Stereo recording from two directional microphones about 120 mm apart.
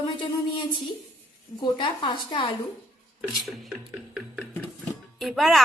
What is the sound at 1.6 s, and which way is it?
Speech, 40° left (ahead or behind).